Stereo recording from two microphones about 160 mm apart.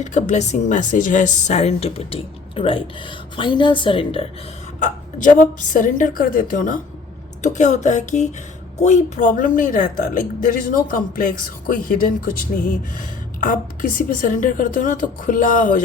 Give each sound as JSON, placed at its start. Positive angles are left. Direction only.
{"t": 0.0, "sound": "speech", "side_deg": 50}
{"t": 4.8, "sound": "a woman's voice", "side_deg": 50}
{"t": 7.4, "sound": "a sound", "side_deg": 45}
{"t": 8.8, "sound": "a woman's voice", "side_deg": 45}
{"t": 14.1, "sound": "a woman's voice", "side_deg": 60}